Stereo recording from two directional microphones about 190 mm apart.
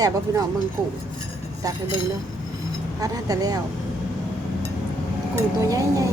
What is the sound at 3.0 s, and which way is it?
Speech, 20° right (ahead or behind).